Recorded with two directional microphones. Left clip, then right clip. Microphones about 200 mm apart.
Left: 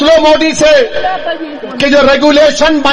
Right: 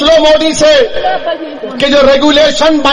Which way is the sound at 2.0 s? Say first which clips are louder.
Left 1 dB; 20° right (ahead or behind).